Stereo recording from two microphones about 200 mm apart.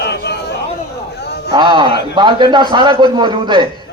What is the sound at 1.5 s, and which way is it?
A man's voice, 25° right (ahead or behind).